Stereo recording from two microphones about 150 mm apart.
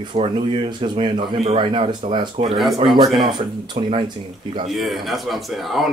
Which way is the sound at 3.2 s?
30° right (ahead or behind).